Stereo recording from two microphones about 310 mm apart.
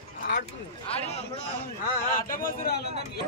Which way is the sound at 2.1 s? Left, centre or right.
Left.